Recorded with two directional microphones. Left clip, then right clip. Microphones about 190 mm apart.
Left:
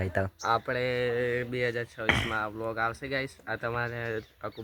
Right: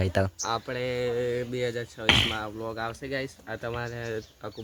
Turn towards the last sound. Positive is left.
turn(degrees=0)  # may be behind; listen again after turning